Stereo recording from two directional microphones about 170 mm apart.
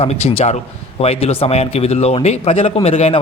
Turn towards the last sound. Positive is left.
turn(degrees=35)  # may be behind; listen again after turning